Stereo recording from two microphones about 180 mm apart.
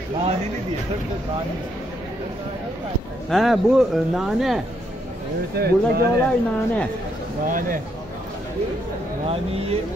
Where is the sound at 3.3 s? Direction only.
Centre (ahead or behind).